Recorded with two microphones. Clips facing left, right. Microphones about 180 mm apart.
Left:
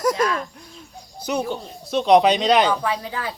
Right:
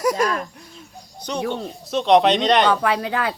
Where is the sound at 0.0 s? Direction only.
10° right (ahead or behind).